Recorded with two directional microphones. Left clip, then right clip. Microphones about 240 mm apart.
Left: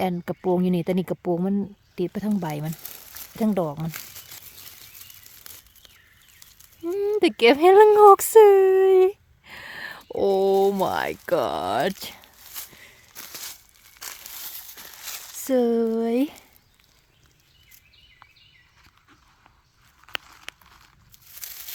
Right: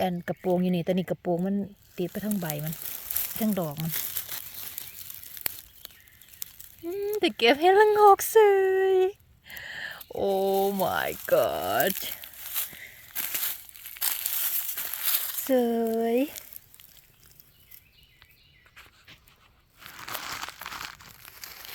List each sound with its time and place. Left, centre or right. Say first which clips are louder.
0.0 s speech: left 3 dB; centre
6.8 s speech: left 6 dB; left
13.1 s crushing: right 5 dB; right
13.7 s crumpling: right 5 dB; right
15.4 s speech: left 4 dB; left